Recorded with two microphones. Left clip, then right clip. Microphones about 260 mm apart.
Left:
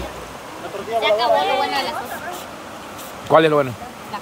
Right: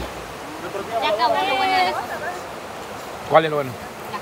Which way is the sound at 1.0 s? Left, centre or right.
Left.